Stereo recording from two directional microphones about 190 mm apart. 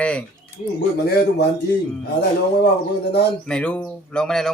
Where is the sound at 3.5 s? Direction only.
5° left (ahead or behind).